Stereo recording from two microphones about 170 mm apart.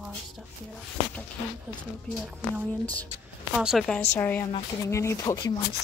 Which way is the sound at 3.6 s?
Centre (ahead or behind).